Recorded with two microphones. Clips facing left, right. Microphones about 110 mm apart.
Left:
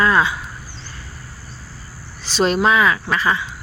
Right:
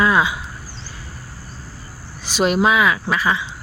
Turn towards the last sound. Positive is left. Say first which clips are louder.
# even
turn(degrees=-5)  # may be behind; listen again after turning